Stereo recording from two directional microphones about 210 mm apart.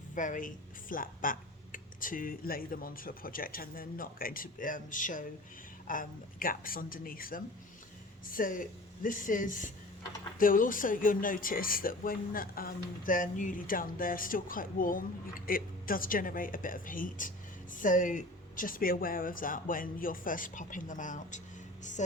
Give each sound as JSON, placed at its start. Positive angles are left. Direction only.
{"t": 0.1, "sound": "a woman's voice", "side_deg": 40}